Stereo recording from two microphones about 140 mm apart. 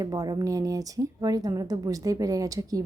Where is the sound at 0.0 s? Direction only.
25° right (ahead or behind).